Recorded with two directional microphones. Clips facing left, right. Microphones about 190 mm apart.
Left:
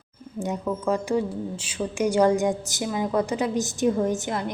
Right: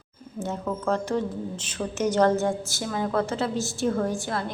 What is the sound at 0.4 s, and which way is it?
A woman's voice, 10° left (ahead or behind).